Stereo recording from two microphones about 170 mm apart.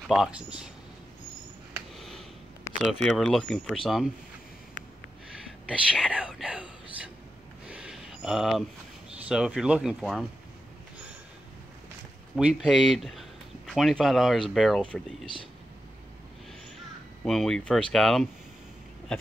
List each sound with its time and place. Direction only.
0.1 s speech: 5° right (ahead or behind)
2.0 s a sound: centre (ahead or behind)
2.7 s a sound: 15° left (ahead or behind)
3.2 s speech: centre (ahead or behind)
5.7 s speech: 5° right (ahead or behind)
7.7 s a sound: 5° right (ahead or behind)
9.3 s speech: 5° right (ahead or behind)
12.4 s speech: 5° right (ahead or behind)
17.2 s speech: centre (ahead or behind)